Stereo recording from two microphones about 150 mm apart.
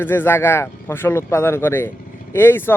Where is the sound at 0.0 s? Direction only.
15° left (ahead or behind).